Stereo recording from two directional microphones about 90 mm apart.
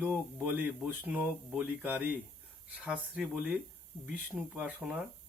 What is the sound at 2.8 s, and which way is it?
Speech, 5° right (ahead or behind).